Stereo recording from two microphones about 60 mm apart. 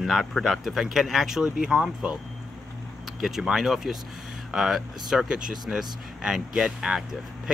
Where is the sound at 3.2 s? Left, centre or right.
Centre.